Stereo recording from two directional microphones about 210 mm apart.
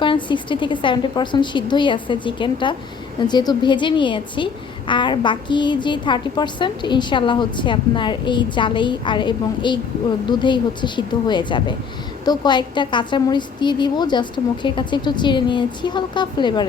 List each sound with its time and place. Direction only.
0.0 s a woman's voice: 25° left (ahead or behind)